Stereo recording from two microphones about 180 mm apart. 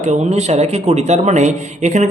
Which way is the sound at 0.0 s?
40° right (ahead or behind).